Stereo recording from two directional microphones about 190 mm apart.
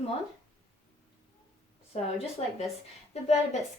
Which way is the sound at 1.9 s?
35° left (ahead or behind).